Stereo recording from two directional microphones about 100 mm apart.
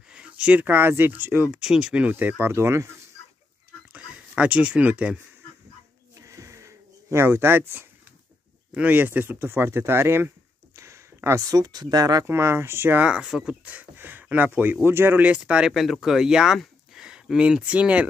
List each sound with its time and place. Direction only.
0.1 s speech: 10° right (ahead or behind); by 2.9 s 25° right (ahead or behind)
3.9 s speech: 10° right (ahead or behind)
6.2 s a sound: 30° right (ahead or behind)
8.7 s speech: 15° right (ahead or behind)
10.8 s a sound: 30° right (ahead or behind)
11.4 s speech: 40° right (ahead or behind)
12.3 s speech: 25° right (ahead or behind)
13.0 s speech: 10° right (ahead or behind)
15.7 s speech: centre (ahead or behind)